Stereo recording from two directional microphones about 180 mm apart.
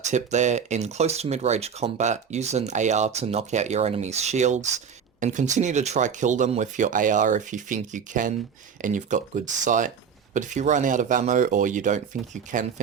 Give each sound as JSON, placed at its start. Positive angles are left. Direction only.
{"t": 0.1, "sound": "speech", "side_deg": -40}